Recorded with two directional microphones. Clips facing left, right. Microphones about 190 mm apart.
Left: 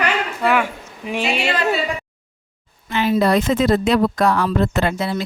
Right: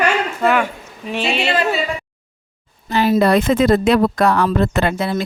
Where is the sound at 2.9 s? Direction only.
40° right (ahead or behind).